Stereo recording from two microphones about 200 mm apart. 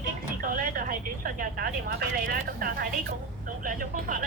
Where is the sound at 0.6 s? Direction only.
45° right (ahead or behind).